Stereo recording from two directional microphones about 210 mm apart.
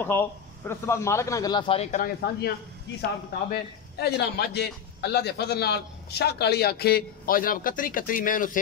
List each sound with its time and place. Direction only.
0.0 s speech: 10° left (ahead or behind); by 2.0 s 30° left (ahead or behind)
3.0 s a man's voice: 45° left (ahead or behind)